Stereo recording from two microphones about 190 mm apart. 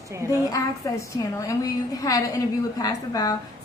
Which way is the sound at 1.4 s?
15° left (ahead or behind).